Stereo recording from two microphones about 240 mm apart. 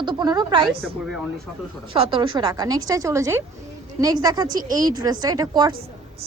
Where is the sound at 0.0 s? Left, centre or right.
Centre.